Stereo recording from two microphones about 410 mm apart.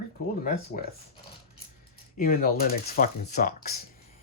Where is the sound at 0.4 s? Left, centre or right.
Centre.